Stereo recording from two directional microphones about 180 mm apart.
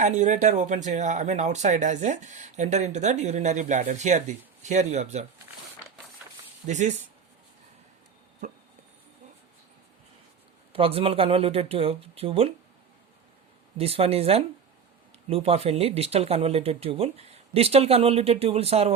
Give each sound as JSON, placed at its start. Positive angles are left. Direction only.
{"t": 0.0, "sound": "speech", "side_deg": -40}
{"t": 6.7, "sound": "speech", "side_deg": -40}
{"t": 8.4, "sound": "a sound", "side_deg": -40}
{"t": 10.7, "sound": "speech", "side_deg": -30}
{"t": 13.7, "sound": "speech", "side_deg": -35}